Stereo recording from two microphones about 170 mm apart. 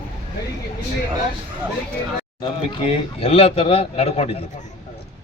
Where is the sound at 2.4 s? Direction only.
30° left (ahead or behind).